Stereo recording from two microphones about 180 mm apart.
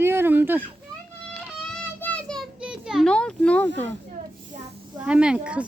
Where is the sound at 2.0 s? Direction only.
5° left (ahead or behind).